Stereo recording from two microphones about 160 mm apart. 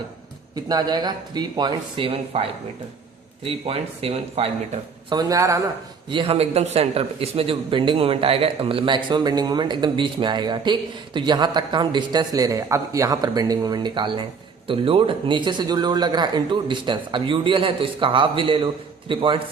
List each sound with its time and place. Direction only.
0.5 s a man's voice: 25° right (ahead or behind)
5.0 s a man's voice: 25° right (ahead or behind)
6.1 s a man's voice: 35° right (ahead or behind)